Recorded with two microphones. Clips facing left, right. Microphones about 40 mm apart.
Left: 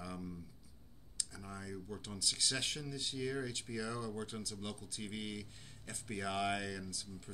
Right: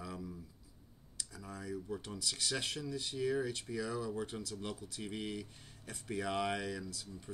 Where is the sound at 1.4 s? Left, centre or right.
Centre.